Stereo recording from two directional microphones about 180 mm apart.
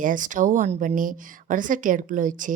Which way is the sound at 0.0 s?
45° right (ahead or behind).